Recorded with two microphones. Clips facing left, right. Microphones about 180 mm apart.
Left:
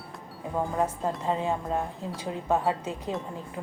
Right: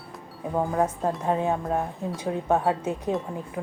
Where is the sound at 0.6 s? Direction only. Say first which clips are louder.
Right 3 dB; centre (ahead or behind).